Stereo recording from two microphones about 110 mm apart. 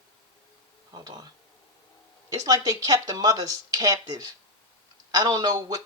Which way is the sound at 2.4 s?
35° right (ahead or behind).